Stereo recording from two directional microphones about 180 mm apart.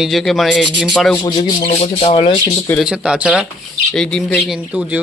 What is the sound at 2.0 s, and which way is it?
Speech, 25° left (ahead or behind).